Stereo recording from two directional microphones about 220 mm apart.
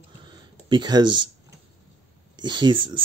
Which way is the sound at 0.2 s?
20° right (ahead or behind).